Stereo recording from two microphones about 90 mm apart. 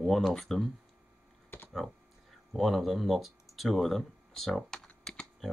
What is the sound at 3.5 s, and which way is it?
Typing, centre (ahead or behind).